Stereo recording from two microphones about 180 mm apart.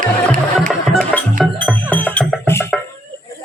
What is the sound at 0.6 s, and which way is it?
Music, centre (ahead or behind).